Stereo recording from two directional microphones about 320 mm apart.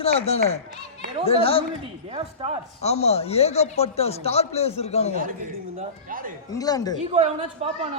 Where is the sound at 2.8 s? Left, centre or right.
Centre.